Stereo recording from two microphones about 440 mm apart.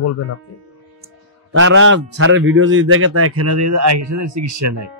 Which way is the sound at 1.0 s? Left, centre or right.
Right.